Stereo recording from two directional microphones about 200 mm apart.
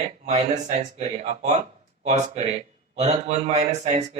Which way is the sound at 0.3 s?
35° right (ahead or behind).